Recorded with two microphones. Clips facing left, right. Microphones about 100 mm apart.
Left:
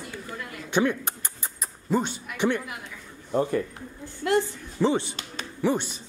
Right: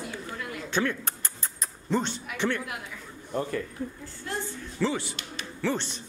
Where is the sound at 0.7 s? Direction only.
15° left (ahead or behind).